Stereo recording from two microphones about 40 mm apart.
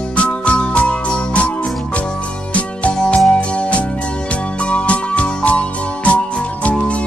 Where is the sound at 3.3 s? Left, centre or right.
Left.